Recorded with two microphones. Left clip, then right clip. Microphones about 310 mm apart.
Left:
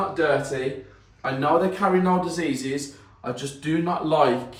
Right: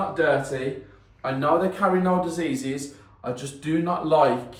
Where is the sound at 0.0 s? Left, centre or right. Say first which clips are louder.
Even; centre.